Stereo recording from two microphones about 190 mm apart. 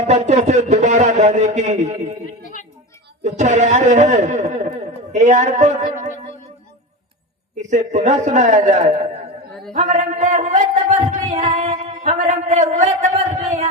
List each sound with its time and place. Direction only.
0.1 s a man's voice: 35° right (ahead or behind)
3.2 s a man's voice: 40° right (ahead or behind)
7.5 s a man's voice: 40° right (ahead or behind)